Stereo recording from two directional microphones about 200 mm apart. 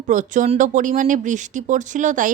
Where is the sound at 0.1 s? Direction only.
40° right (ahead or behind).